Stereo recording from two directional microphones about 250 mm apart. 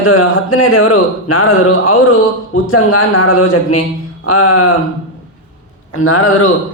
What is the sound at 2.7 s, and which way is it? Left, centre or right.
A man's voice, left.